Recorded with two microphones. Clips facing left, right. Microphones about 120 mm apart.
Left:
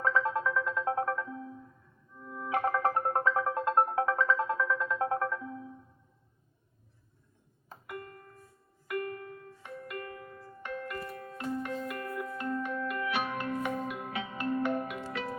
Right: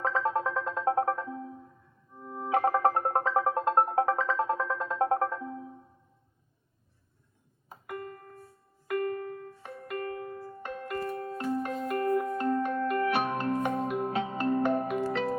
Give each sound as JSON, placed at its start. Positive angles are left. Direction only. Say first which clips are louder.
{"t": 0.0, "sound": "music", "louder": "right 1 dB", "side_deg": -35}
{"t": 7.9, "sound": "music", "louder": "right 4 dB", "side_deg": -30}